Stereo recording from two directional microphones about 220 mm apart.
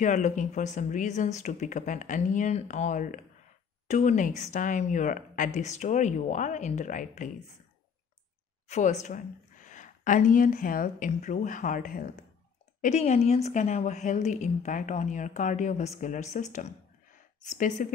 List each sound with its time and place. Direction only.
0.0 s a woman's voice: 35° left (ahead or behind)
8.6 s a woman's voice: 30° left (ahead or behind)